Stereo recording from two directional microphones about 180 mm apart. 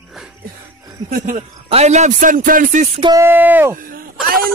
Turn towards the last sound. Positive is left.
turn(degrees=-50)  # may be behind; listen again after turning